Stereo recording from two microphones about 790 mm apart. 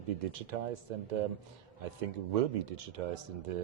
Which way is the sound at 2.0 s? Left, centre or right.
Right.